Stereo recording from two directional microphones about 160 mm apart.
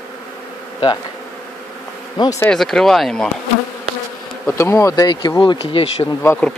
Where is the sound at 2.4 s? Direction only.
5° left (ahead or behind).